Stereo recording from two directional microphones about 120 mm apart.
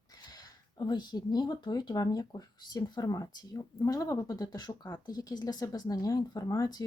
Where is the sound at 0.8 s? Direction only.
35° left (ahead or behind).